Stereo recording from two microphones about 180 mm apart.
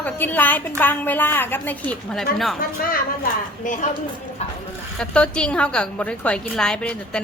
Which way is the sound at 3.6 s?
45° left (ahead or behind).